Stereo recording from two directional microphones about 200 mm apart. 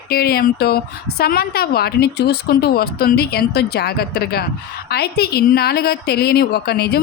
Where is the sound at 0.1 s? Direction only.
50° left (ahead or behind).